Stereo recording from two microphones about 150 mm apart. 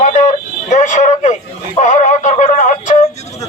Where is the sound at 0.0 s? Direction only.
55° left (ahead or behind).